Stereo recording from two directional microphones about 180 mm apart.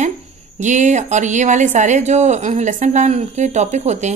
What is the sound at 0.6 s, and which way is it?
A woman's voice, 40° right (ahead or behind).